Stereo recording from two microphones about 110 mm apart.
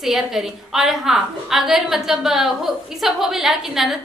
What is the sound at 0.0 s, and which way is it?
A woman's voice, 5° right (ahead or behind).